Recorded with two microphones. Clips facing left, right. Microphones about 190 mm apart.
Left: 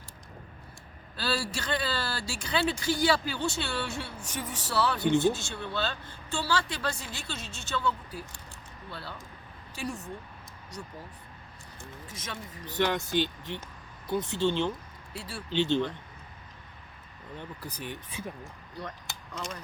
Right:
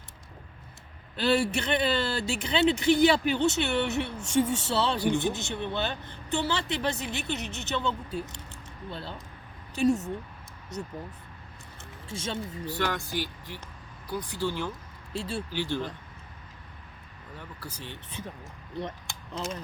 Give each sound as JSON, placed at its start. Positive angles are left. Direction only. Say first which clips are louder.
{"t": 1.1, "sound": "speech", "louder": "right 7 dB", "side_deg": -20}
{"t": 11.8, "sound": "a sound", "louder": "right 6 dB", "side_deg": -30}
{"t": 12.6, "sound": "speech", "louder": "left 4 dB", "side_deg": 20}
{"t": 15.1, "sound": "speech", "louder": "right 8 dB", "side_deg": -25}
{"t": 15.4, "sound": "speech", "louder": "left 4 dB", "side_deg": 25}
{"t": 17.3, "sound": "speech", "louder": "left 2 dB", "side_deg": 20}